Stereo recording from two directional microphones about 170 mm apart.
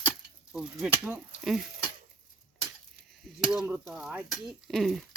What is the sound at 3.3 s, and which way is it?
Speech, 5° right (ahead or behind).